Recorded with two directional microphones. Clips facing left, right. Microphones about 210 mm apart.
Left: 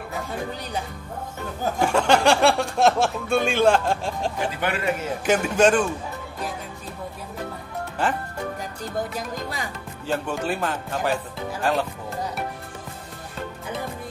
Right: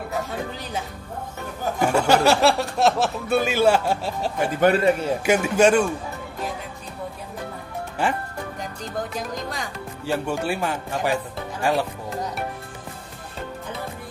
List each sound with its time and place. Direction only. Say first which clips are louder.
1.8 s speech: right 1 dB; 5° right (ahead or behind)
4.6 s a man's voice: right 11 dB; 40° right (ahead or behind)
5.2 s speech: even; 10° right (ahead or behind)
8.0 s speech: right 1 dB; 10° right (ahead or behind)
9.1 s speech: right 1 dB; 5° left (ahead or behind)
10.0 s speech: right 1 dB; 10° right (ahead or behind)